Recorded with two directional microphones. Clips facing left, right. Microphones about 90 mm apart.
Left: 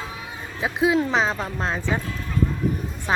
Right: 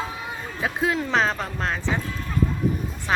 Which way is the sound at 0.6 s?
10° left (ahead or behind).